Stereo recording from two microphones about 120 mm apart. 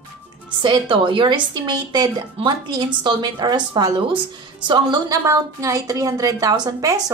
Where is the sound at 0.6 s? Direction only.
40° right (ahead or behind).